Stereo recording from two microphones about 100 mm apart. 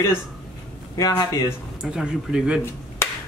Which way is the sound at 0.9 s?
35° left (ahead or behind).